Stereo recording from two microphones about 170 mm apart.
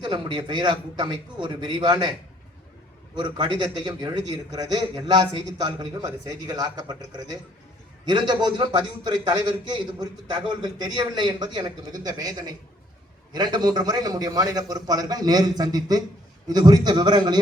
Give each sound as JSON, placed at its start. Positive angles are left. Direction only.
{"t": 0.0, "sound": "a man's voice", "side_deg": -25}
{"t": 3.2, "sound": "a man's voice", "side_deg": -25}